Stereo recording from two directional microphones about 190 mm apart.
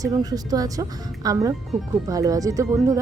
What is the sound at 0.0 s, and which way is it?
A woman's voice, 20° right (ahead or behind).